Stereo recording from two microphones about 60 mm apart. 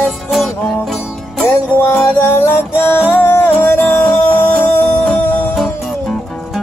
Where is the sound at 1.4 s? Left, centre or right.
Left.